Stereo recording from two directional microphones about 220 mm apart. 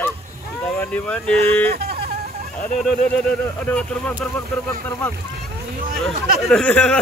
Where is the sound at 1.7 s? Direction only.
45° right (ahead or behind).